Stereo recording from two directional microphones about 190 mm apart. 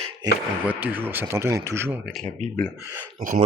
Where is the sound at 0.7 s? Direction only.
10° right (ahead or behind).